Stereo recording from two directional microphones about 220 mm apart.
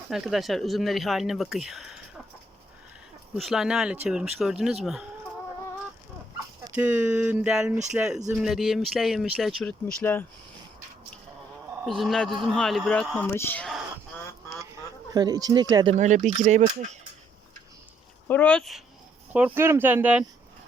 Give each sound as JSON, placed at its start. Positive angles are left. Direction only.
{"t": 0.1, "sound": "speech", "side_deg": 0}
{"t": 3.3, "sound": "speech", "side_deg": 0}
{"t": 6.6, "sound": "speech", "side_deg": -10}
{"t": 11.9, "sound": "speech", "side_deg": 0}
{"t": 15.1, "sound": "speech", "side_deg": -20}
{"t": 16.0, "sound": "speech", "side_deg": -35}
{"t": 18.3, "sound": "speech", "side_deg": 5}